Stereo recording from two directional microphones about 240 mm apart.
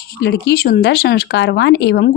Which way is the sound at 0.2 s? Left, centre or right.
Left.